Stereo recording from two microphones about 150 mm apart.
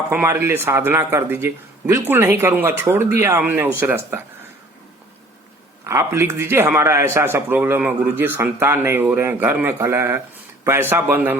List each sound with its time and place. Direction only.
0.1 s a man's voice: 15° right (ahead or behind)
5.8 s a man's voice: 20° right (ahead or behind)